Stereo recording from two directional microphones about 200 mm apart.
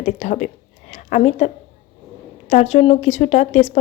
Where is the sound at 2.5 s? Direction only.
35° left (ahead or behind).